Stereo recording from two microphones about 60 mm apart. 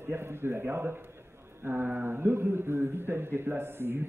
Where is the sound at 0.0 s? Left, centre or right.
Right.